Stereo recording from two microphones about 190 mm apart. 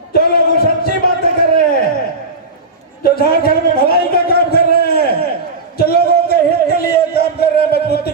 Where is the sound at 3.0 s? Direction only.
50° left (ahead or behind).